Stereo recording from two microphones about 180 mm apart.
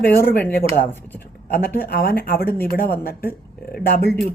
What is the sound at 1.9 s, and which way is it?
Speech, 55° left (ahead or behind).